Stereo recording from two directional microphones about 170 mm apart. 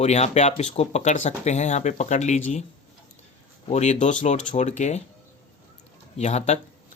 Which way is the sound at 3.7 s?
40° left (ahead or behind).